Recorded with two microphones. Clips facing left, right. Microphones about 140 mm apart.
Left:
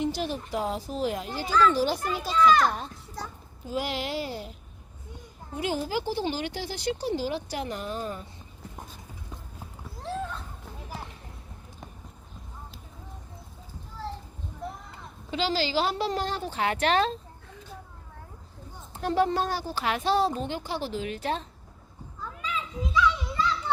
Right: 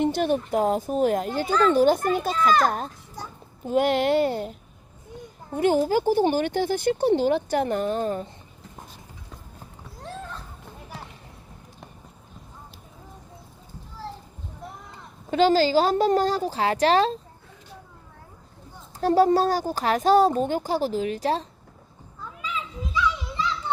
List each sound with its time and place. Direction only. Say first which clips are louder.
0.0 s speech: right 7 dB; 55° right (ahead or behind)
5.5 s speech: right 9 dB; 55° right (ahead or behind)
15.3 s speech: right 9 dB; 50° right (ahead or behind)
18.9 s speech: right 6 dB; 40° right (ahead or behind)